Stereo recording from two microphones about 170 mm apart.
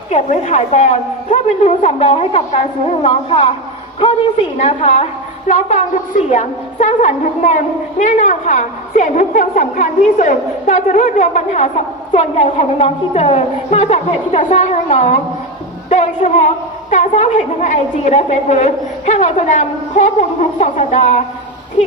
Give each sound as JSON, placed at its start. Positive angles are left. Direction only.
{"t": 0.1, "sound": "a woman's voice", "side_deg": 45}
{"t": 4.5, "sound": "a woman's voice", "side_deg": 40}
{"t": 15.9, "sound": "a sound", "side_deg": 40}
{"t": 16.9, "sound": "a woman's voice", "side_deg": 40}